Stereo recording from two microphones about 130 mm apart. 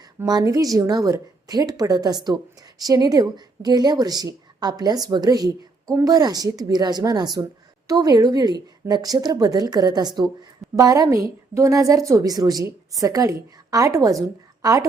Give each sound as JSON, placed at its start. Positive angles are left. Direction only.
{"t": 0.3, "sound": "a woman's voice", "side_deg": -30}